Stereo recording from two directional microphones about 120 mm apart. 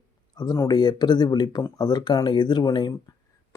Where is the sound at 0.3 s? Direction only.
35° left (ahead or behind).